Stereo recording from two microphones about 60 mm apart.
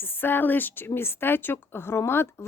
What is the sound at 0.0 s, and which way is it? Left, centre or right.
A woman's voice, left.